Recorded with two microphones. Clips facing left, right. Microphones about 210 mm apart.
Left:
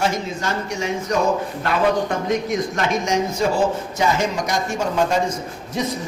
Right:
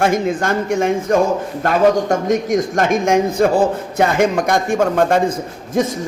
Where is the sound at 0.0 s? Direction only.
50° right (ahead or behind).